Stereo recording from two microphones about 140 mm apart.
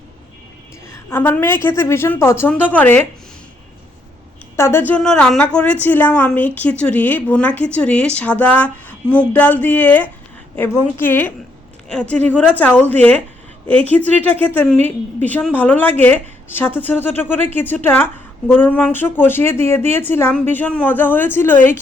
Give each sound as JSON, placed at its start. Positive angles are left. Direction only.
{"t": 1.1, "sound": "a woman's voice", "side_deg": 15}
{"t": 4.5, "sound": "a woman's voice", "side_deg": 20}